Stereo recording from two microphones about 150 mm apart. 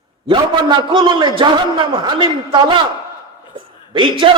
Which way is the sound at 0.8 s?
30° right (ahead or behind).